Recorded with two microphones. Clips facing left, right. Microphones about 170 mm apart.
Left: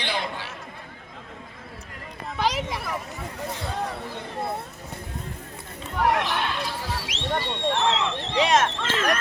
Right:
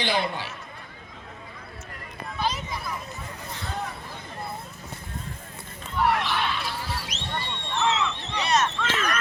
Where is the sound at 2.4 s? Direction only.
90° left.